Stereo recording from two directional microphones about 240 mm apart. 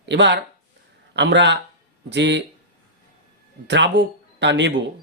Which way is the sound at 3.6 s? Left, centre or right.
Right.